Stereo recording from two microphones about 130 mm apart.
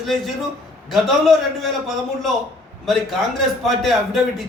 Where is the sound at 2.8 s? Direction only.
Centre (ahead or behind).